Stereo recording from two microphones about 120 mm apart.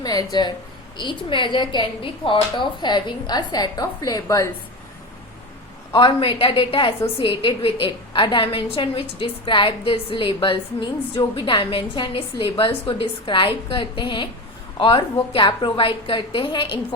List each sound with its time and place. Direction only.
0.0 s a woman's voice: 35° left (ahead or behind)
5.9 s a woman's voice: 45° left (ahead or behind)